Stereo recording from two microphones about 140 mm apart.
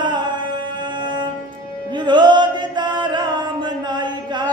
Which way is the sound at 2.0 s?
35° right (ahead or behind).